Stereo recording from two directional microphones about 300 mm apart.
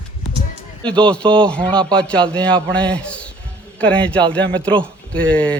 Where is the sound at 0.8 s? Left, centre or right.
Centre.